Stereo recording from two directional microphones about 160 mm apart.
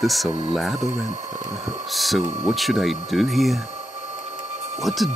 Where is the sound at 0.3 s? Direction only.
30° right (ahead or behind).